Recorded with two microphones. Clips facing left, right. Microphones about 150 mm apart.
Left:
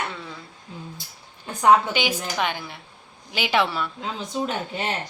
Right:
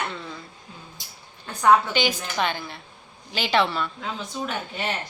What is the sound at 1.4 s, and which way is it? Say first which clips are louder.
A woman's voice: left 1 dB; 15° left (ahead or behind).